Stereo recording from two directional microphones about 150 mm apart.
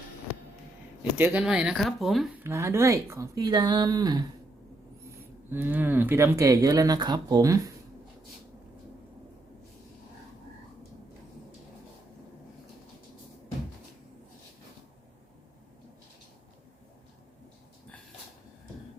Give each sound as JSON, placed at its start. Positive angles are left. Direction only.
{"t": 1.2, "sound": "speech", "side_deg": -10}
{"t": 2.3, "sound": "speech", "side_deg": -15}
{"t": 5.5, "sound": "speech", "side_deg": -15}